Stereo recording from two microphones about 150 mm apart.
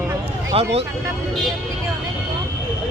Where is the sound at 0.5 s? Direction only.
40° right (ahead or behind).